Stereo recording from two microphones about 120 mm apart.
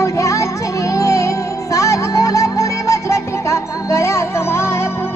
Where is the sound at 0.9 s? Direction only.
25° left (ahead or behind).